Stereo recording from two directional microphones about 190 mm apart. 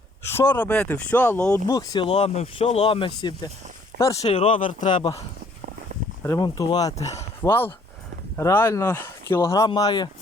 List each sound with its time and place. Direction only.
0.2 s speech: 10° left (ahead or behind)
4.2 s speech: 30° left (ahead or behind)
4.6 s speech: 40° left (ahead or behind)
6.2 s speech: 15° left (ahead or behind)